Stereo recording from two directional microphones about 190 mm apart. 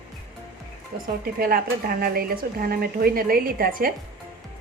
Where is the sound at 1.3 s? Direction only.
50° right (ahead or behind).